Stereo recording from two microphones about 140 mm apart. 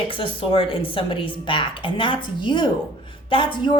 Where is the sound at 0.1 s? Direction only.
40° left (ahead or behind).